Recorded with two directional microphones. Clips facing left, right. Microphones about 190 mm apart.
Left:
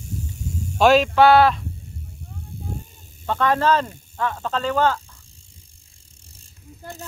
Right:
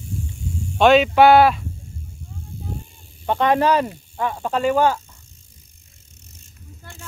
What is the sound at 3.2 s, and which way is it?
Speech, 20° right (ahead or behind).